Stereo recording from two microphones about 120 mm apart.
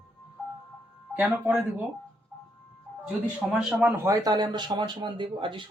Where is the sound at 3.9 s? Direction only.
25° right (ahead or behind); by 5.7 s 45° right (ahead or behind).